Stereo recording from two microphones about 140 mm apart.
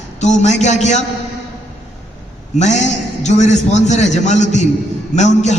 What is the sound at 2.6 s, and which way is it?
A man's voice, 55° left (ahead or behind).